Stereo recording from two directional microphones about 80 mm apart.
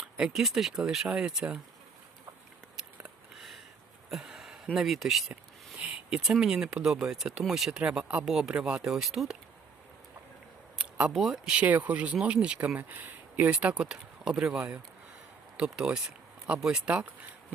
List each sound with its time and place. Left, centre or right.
0.2 s speech: centre
3.3 s sniff: centre
4.1 s speech: centre
5.8 s speech: centre
7.8 s speech: centre
10.8 s a sound: centre
11.1 s speech: centre